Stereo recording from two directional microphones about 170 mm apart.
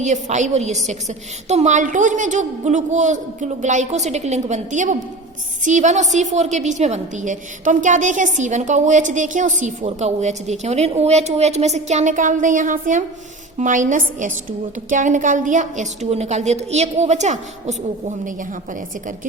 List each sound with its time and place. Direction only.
0.0 s a woman's voice: 45° right (ahead or behind)